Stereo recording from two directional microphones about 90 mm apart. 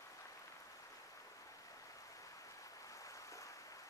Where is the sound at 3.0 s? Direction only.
35° left (ahead or behind).